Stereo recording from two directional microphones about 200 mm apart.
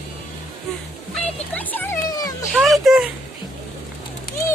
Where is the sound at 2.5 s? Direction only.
Centre (ahead or behind).